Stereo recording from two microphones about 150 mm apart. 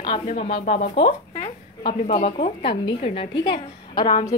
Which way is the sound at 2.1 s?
40° left (ahead or behind).